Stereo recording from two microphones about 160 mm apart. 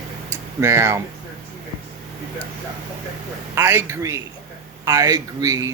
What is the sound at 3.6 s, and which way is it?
A man's voice, 15° right (ahead or behind).